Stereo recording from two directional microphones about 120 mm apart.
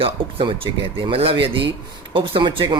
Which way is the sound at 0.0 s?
50° right (ahead or behind).